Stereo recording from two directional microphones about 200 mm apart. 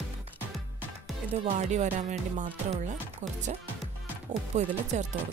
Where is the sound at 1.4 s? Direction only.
35° right (ahead or behind).